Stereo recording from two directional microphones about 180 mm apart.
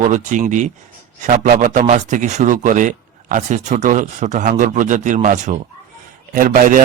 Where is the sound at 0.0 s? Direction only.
40° right (ahead or behind).